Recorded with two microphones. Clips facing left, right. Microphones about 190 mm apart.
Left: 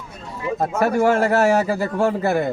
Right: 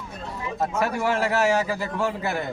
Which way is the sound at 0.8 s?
45° left (ahead or behind).